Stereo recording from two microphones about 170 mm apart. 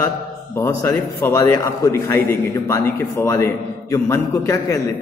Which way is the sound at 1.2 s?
15° left (ahead or behind).